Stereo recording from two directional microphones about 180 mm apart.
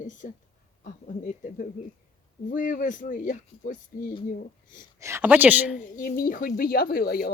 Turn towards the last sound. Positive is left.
turn(degrees=55)  # may be behind; listen again after turning